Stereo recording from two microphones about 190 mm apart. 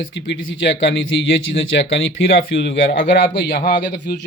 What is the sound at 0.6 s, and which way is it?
A man's voice, 75° left (ahead or behind).